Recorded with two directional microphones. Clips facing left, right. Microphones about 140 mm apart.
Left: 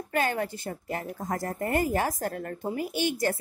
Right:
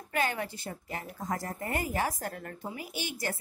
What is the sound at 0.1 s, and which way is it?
A woman's voice, 45° left (ahead or behind).